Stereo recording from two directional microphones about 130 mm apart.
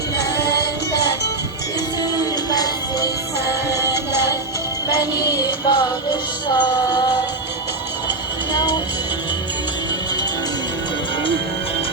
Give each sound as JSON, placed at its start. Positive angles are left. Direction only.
{"t": 2.0, "sound": "music", "side_deg": 30}
{"t": 5.3, "sound": "music", "side_deg": 30}
{"t": 8.5, "sound": "music", "side_deg": 35}